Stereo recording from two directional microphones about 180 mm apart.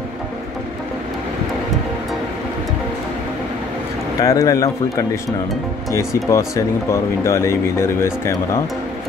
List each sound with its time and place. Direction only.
4.2 s speech: 20° left (ahead or behind)